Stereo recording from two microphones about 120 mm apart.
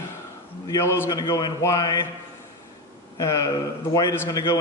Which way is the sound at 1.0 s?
35° left (ahead or behind).